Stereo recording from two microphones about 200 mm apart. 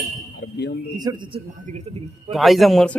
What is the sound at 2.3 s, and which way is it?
Speech, centre (ahead or behind).